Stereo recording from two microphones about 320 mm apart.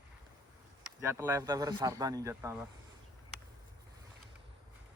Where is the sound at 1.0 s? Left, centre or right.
Centre.